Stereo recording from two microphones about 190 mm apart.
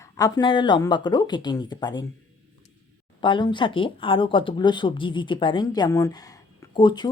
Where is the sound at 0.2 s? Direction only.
20° left (ahead or behind).